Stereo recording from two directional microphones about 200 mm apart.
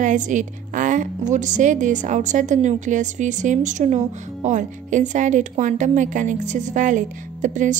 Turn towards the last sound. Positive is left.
turn(degrees=-40)  # may be behind; listen again after turning